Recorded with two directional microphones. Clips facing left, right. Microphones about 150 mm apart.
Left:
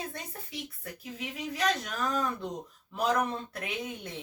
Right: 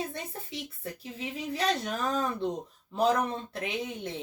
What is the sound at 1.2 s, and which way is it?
Speech, 30° right (ahead or behind).